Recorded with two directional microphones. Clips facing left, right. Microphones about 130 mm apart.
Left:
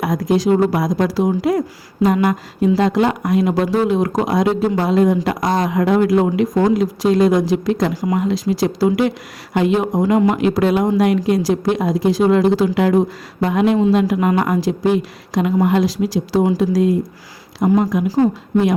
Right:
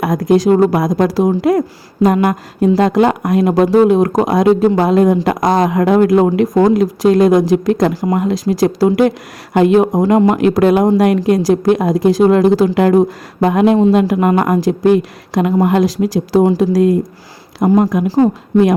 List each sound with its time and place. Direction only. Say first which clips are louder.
0.0 s speech: right 5 dB; 50° right (ahead or behind)